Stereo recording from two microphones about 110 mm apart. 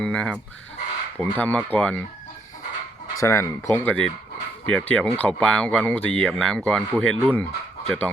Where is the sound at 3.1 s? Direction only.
25° left (ahead or behind).